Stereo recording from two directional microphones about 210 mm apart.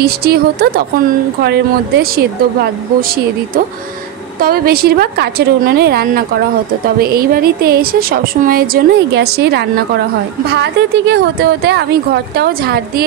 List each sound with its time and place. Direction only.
0.0 s a woman's voice: 50° right (ahead or behind)
4.4 s a woman's voice: 45° right (ahead or behind)